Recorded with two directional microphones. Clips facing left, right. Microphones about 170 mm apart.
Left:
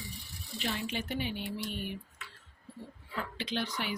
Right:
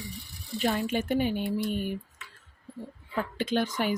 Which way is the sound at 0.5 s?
45° right (ahead or behind).